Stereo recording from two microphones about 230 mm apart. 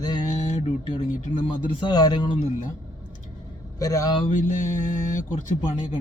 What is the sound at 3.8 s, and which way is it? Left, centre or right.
Speech, centre.